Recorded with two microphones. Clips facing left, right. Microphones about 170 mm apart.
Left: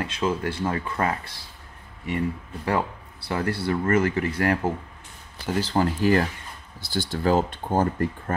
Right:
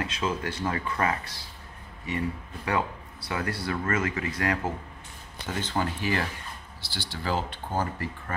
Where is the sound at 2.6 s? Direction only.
30° left (ahead or behind).